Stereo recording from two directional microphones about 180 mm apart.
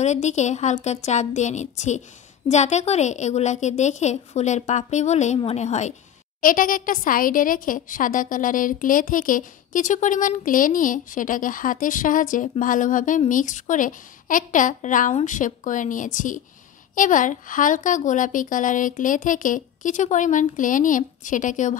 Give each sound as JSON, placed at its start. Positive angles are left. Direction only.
{"t": 0.0, "sound": "a woman's voice", "side_deg": 40}